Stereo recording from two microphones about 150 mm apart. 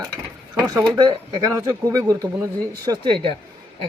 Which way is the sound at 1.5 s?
20° right (ahead or behind).